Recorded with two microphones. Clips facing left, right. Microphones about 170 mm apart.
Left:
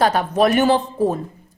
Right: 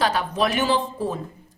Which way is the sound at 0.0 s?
50° left (ahead or behind).